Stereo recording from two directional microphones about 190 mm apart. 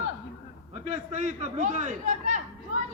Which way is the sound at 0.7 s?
35° right (ahead or behind).